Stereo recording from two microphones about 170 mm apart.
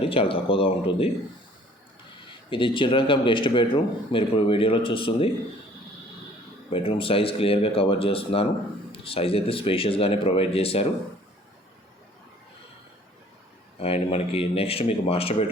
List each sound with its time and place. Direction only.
0.0 s speech: 35° left (ahead or behind)
2.5 s speech: 30° left (ahead or behind)
6.7 s speech: 30° left (ahead or behind)
13.7 s speech: 35° left (ahead or behind)